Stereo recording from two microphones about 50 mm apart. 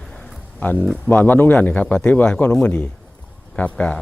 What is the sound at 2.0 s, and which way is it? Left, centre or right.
Speech, centre.